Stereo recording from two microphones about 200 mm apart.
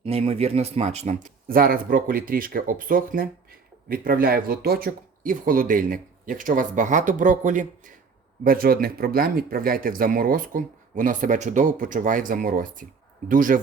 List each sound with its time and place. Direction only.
0.0 s speech: 30° right (ahead or behind)